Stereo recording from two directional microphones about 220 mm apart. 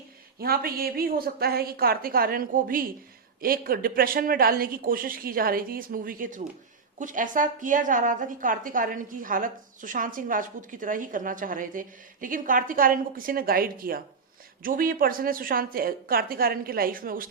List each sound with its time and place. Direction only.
0.3 s a woman's voice: 40° right (ahead or behind)